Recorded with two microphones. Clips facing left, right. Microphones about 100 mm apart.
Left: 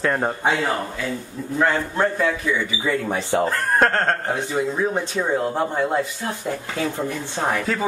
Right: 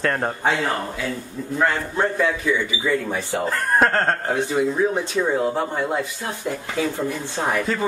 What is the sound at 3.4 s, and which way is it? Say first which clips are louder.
A man's voice: right 3 dB; centre (ahead or behind).